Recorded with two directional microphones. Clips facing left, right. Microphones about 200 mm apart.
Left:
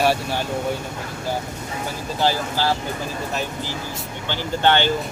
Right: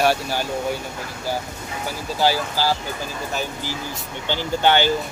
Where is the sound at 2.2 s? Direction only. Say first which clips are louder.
Right 1 dB; 5° right (ahead or behind).